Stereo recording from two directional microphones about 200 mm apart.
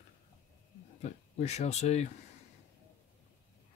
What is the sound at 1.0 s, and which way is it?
Speech, 35° left (ahead or behind).